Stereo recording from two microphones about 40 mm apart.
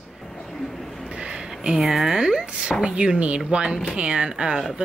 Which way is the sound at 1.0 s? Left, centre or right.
Right.